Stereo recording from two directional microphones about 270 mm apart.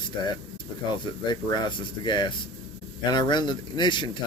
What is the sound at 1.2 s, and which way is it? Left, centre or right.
Speech, centre.